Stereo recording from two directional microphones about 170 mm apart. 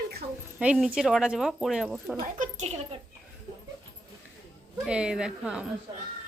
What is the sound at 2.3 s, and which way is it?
Speech, 45° right (ahead or behind).